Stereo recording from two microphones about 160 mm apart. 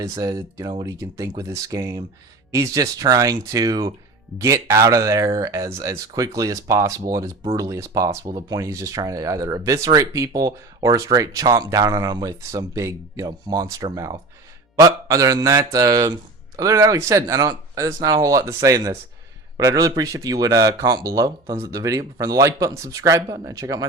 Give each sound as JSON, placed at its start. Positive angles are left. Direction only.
{"t": 0.0, "sound": "speech", "side_deg": -20}